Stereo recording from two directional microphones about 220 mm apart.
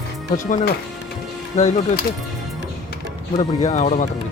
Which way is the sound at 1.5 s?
30° left (ahead or behind).